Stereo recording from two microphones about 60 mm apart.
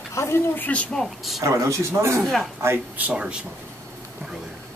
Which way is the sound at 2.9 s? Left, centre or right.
Right.